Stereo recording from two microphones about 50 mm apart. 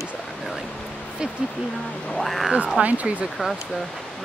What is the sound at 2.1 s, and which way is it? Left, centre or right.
Speech, centre.